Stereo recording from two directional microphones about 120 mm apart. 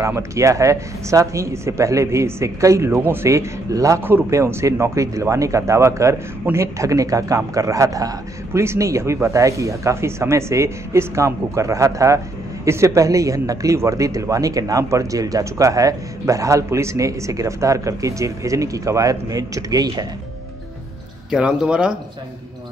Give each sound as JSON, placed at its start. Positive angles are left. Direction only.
{"t": 0.0, "sound": "speech", "side_deg": -25}
{"t": 21.3, "sound": "speech", "side_deg": -5}